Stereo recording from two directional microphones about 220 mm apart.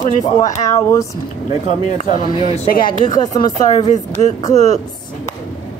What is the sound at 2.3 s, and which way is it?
Speech, 20° left (ahead or behind).